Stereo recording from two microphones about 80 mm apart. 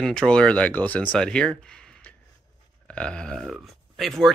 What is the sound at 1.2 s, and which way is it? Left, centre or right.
Speech, centre.